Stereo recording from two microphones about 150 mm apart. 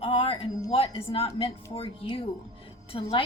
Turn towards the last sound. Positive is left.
turn(degrees=35)  # may be behind; listen again after turning